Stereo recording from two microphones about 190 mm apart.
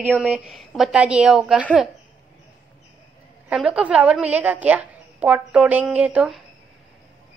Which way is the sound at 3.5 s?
5° right (ahead or behind).